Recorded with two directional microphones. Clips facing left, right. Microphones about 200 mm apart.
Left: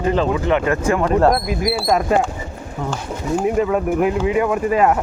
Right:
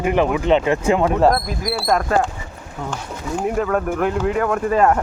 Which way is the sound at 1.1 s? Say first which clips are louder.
Left 3 dB; centre (ahead or behind).